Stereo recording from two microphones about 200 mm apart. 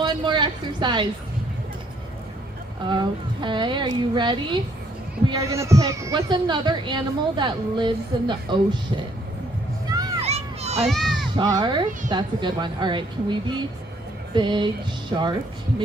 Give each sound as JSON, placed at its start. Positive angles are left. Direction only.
{"t": 0.0, "sound": "a woman's voice", "side_deg": -20}
{"t": 2.9, "sound": "speech", "side_deg": -20}
{"t": 9.9, "sound": "a sound", "side_deg": -20}
{"t": 10.2, "sound": "a sound", "side_deg": -30}
{"t": 10.8, "sound": "speech", "side_deg": 0}
{"t": 11.3, "sound": "speech", "side_deg": -20}